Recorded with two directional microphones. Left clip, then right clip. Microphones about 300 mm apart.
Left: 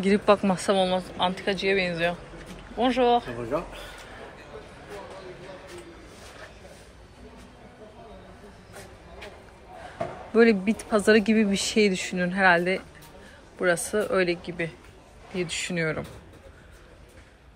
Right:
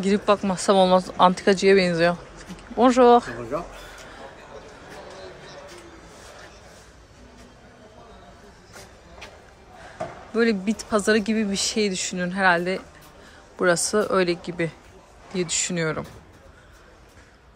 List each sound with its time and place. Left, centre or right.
0.0 s speech: centre
1.3 s speech: right
1.8 s speech: right
10.3 s speech: centre